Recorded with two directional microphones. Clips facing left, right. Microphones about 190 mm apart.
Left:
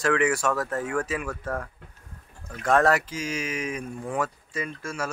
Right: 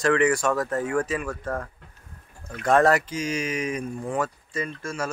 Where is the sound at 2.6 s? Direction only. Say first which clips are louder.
Right 2 dB; centre (ahead or behind).